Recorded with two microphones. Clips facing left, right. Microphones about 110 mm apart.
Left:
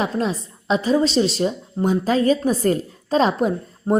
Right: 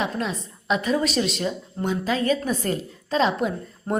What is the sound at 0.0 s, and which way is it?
Speech, 35° left (ahead or behind).